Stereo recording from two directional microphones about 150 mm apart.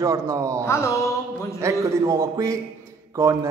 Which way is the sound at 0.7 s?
20° left (ahead or behind).